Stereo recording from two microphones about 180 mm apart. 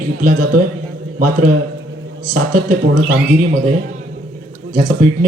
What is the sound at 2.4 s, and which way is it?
Speech, 50° right (ahead or behind).